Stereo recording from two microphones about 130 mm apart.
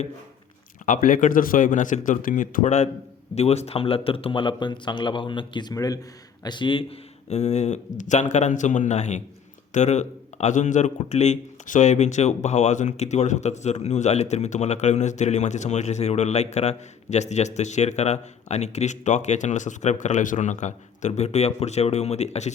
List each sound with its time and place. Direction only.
0.9 s speech: 85° left; by 7.0 s 40° left (ahead or behind)
7.3 s speech: 60° left (ahead or behind)
21.1 s speech: 55° left (ahead or behind)